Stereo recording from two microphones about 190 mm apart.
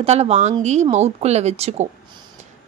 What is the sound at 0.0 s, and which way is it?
Speech, 35° right (ahead or behind).